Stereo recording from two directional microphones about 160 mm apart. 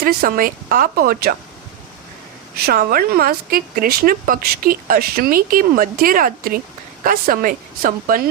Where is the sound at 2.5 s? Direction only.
70° right (ahead or behind).